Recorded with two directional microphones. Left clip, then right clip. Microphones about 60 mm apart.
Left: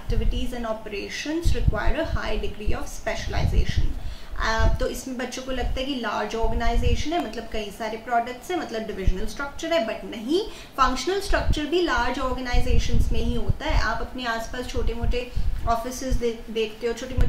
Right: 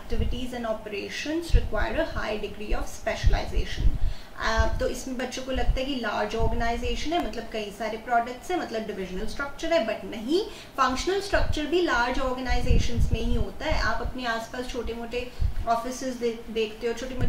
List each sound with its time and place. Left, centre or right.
0.5 s a woman's voice: centre
14.2 s a woman's voice: left
14.7 s a woman's voice: centre